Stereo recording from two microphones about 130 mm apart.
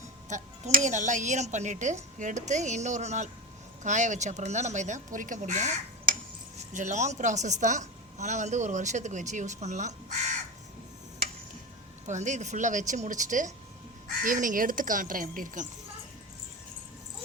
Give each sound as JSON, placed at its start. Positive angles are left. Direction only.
{"t": 0.3, "sound": "speech", "side_deg": -70}
{"t": 6.7, "sound": "a woman's voice", "side_deg": -70}
{"t": 12.0, "sound": "speech", "side_deg": -65}
{"t": 14.2, "sound": "speech", "side_deg": -90}